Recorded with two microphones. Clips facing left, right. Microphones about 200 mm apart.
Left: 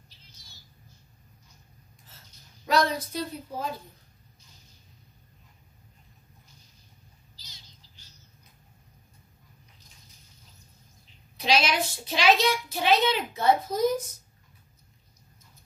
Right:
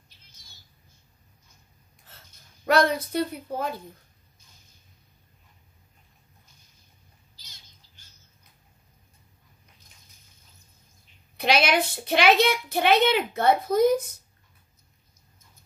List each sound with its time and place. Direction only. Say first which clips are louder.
2.6 s a woman's voice: right 3 dB; 60° right (ahead or behind)
7.4 s bird: left 2 dB; 50° right (ahead or behind)
11.3 s a woman's voice: right 3 dB; 60° right (ahead or behind)